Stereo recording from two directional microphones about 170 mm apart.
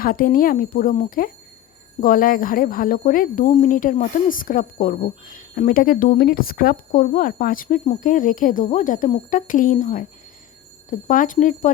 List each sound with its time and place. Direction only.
0.0 s a woman's voice: 55° left (ahead or behind)